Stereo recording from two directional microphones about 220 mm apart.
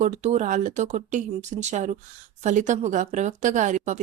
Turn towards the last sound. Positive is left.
turn(degrees=-30)  # may be behind; listen again after turning